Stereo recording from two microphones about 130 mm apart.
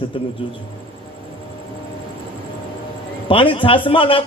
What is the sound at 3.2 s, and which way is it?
Speech, 40° left (ahead or behind).